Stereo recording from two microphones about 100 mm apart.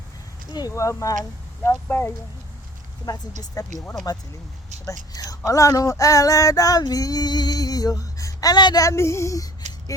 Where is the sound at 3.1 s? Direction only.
35° left (ahead or behind).